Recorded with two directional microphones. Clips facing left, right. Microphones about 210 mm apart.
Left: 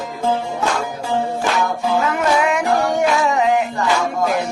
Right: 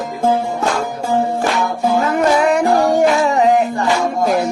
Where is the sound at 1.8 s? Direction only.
40° right (ahead or behind).